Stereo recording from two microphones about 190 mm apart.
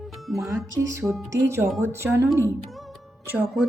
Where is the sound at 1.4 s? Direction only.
15° right (ahead or behind).